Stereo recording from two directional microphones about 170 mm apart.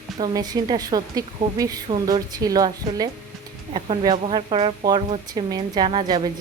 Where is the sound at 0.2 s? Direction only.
20° right (ahead or behind).